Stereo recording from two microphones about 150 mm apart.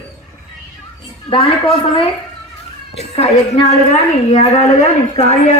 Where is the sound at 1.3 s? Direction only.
35° left (ahead or behind).